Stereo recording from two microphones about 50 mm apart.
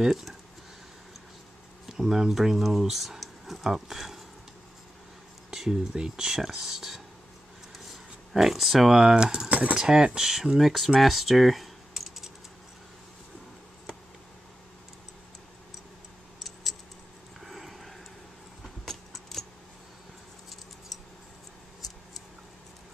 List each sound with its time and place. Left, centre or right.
0.0 s speech: centre
1.9 s speech: centre
5.5 s speech: centre; by 9.8 s right
9.8 s speech: centre
17.4 s a sound: centre
18.9 s keys jangling: centre